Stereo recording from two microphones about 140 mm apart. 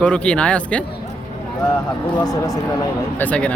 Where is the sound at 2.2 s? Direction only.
25° left (ahead or behind).